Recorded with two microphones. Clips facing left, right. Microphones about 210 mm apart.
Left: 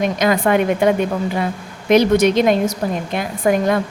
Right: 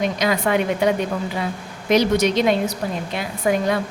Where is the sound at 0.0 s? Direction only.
50° left (ahead or behind).